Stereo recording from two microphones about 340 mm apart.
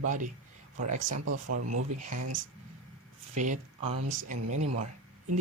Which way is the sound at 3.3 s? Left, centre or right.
Right.